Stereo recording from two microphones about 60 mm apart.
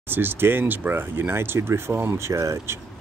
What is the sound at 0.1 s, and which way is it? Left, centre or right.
Speech, right.